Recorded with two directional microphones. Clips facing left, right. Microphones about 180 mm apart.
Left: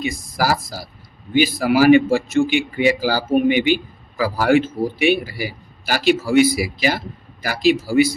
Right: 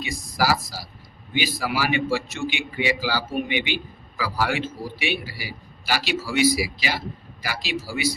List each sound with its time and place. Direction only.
0.0 s a man's voice: 50° left (ahead or behind)